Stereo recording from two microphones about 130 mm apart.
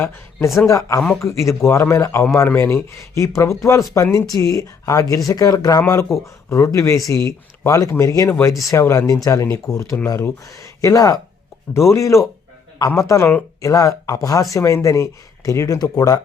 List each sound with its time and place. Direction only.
0.7 s speech: 25° left (ahead or behind)